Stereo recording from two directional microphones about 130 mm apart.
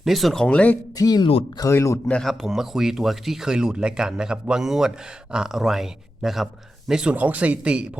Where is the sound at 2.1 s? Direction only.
5° left (ahead or behind).